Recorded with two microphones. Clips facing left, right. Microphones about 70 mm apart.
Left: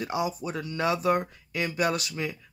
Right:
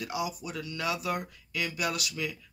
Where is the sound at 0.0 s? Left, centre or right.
Left.